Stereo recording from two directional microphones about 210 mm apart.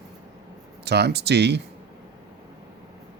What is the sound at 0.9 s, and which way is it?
Speech, 50° right (ahead or behind).